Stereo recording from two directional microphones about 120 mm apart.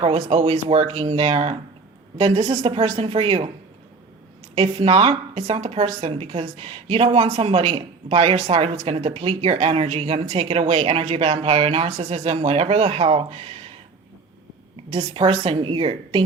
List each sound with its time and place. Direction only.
0.0 s speech: 55° right (ahead or behind)
4.5 s a woman's voice: 50° right (ahead or behind)
14.8 s speech: 50° right (ahead or behind)